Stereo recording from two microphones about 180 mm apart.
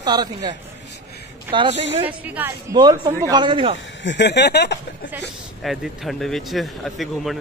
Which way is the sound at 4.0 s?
80° left.